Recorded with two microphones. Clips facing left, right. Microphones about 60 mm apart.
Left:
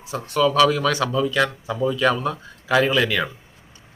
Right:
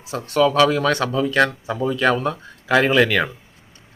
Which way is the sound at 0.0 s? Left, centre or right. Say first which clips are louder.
Right 3 dB; right.